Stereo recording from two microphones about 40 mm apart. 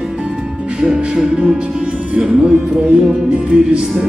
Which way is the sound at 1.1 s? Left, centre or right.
Right.